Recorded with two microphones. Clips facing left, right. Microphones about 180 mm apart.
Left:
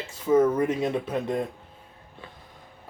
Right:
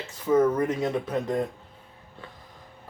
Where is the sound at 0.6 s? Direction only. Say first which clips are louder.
Left 1 dB; 20° left (ahead or behind).